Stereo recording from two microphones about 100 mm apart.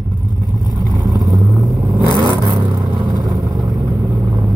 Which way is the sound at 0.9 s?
40° right (ahead or behind).